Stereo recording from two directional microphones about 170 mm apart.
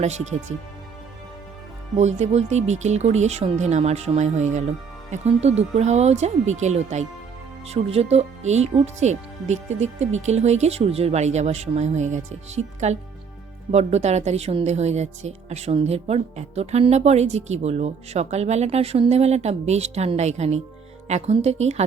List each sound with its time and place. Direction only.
0.0 s a woman's voice: 40° right (ahead or behind)
2.0 s a woman's voice: 40° right (ahead or behind)